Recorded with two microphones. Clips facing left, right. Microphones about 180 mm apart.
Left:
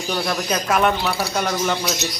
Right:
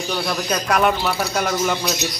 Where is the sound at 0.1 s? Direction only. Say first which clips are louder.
Left 1 dB; centre (ahead or behind).